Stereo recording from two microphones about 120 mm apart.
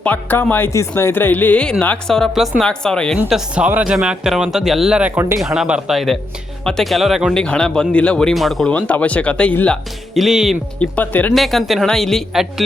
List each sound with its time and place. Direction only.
0.0 s speech: 15° left (ahead or behind)
3.2 s speech: 5° right (ahead or behind)
7.3 s speech: 5° left (ahead or behind)
8.7 s speech: 10° left (ahead or behind)
10.2 s speech: 5° right (ahead or behind)
10.8 s speech: 15° left (ahead or behind)
11.3 s speech: centre (ahead or behind)